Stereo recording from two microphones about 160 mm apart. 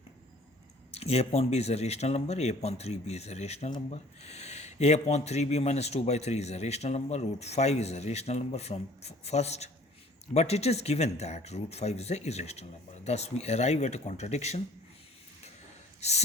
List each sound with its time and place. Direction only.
0.9 s speech: 40° left (ahead or behind)
16.0 s speech: 40° left (ahead or behind)